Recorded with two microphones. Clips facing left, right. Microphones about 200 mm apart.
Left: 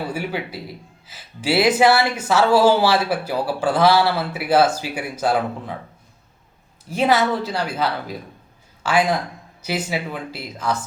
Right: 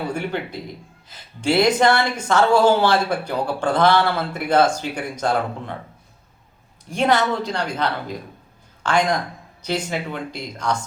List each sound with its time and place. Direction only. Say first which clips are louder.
0.1 s a woman's voice: right 1 dB; 5° left (ahead or behind)
6.8 s a woman's voice: left 1 dB; 5° left (ahead or behind)